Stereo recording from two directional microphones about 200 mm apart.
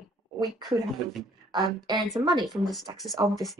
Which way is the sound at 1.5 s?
20° right (ahead or behind).